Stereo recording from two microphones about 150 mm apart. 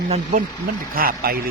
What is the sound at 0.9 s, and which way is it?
Speech, 80° right.